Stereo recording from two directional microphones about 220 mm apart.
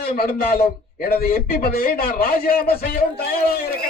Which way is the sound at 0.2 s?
45° left (ahead or behind).